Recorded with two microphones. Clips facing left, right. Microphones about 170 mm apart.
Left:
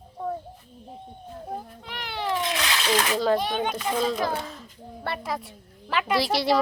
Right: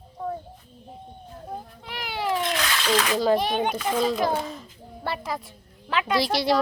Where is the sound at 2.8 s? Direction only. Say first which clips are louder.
Right 1 dB; centre (ahead or behind).